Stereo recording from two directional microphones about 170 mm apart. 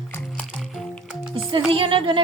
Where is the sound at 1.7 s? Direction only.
30° right (ahead or behind).